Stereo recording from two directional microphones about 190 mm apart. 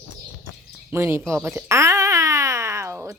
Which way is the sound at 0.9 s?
10° right (ahead or behind).